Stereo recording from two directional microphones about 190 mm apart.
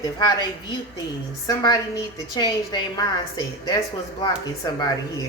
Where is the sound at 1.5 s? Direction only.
20° left (ahead or behind).